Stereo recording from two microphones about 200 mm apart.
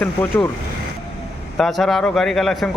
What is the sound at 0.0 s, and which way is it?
Speech, 10° left (ahead or behind).